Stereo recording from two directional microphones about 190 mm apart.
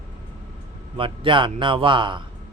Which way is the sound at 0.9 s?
25° right (ahead or behind).